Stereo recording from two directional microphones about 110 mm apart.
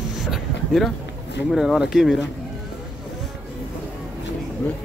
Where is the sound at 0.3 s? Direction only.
Centre (ahead or behind).